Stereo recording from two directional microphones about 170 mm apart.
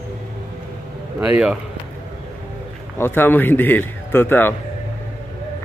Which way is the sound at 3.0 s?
10° left (ahead or behind).